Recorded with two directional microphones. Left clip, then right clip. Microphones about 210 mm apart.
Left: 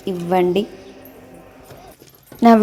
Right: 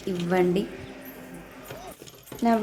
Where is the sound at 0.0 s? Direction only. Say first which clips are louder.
Left 7 dB; 30° left (ahead or behind).